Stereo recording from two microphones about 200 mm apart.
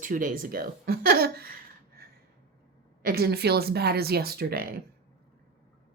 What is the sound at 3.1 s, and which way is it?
Speech, 50° right (ahead or behind).